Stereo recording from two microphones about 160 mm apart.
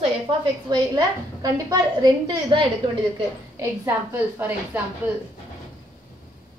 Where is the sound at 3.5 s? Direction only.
15° right (ahead or behind).